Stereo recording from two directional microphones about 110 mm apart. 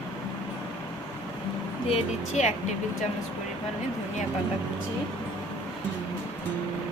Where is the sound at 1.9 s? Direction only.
90° left.